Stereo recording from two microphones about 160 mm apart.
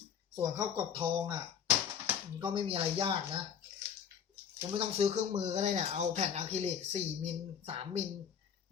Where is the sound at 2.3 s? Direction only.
30° right (ahead or behind).